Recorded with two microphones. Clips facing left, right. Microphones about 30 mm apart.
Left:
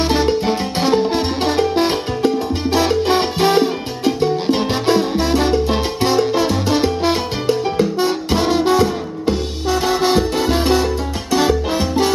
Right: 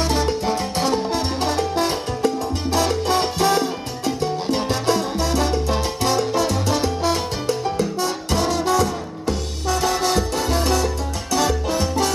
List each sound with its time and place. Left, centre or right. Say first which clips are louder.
0.0 s music: left 5 dB; left